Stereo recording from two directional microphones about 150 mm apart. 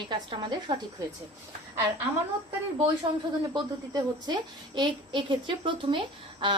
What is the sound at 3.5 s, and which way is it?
A woman's voice, 30° right (ahead or behind).